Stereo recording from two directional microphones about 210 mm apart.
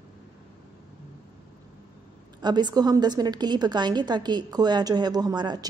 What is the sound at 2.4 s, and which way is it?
A woman's voice, 20° right (ahead or behind).